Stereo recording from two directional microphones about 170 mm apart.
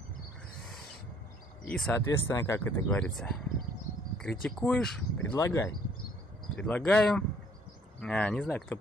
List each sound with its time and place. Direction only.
1.7 s speech: 5° left (ahead or behind)
2.0 s speech: 15° left (ahead or behind)
5.3 s speech: 20° left (ahead or behind)
6.5 s speech: 5° left (ahead or behind)